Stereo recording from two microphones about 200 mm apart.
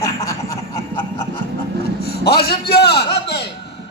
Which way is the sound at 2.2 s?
50° left (ahead or behind).